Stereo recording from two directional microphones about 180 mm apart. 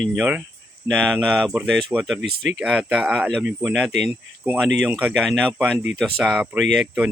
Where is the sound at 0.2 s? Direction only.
5° right (ahead or behind).